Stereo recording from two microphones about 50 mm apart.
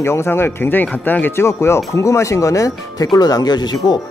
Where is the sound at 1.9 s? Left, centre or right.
Left.